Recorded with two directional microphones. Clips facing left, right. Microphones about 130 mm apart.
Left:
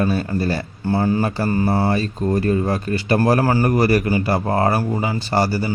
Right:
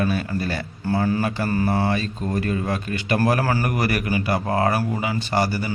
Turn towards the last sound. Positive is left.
turn(degrees=35)  # may be behind; listen again after turning